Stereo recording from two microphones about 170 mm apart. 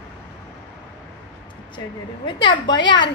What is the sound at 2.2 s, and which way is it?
Speech, 25° left (ahead or behind).